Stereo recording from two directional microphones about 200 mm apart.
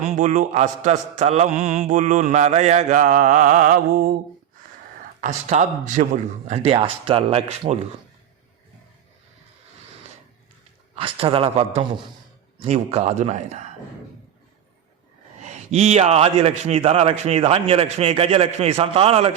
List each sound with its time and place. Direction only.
0.2 s mantra: 40° right (ahead or behind)
5.2 s mantra: 35° right (ahead or behind)
6.5 s a man's voice: 30° right (ahead or behind)
10.9 s a man's voice: 25° right (ahead or behind)
12.6 s mantra: 30° right (ahead or behind)
15.4 s a man's voice: 35° right (ahead or behind)